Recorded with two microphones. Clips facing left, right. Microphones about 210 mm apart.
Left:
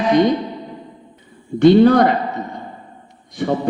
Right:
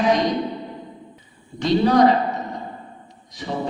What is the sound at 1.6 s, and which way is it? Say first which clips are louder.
Speech: left 6 dB; 55° left (ahead or behind).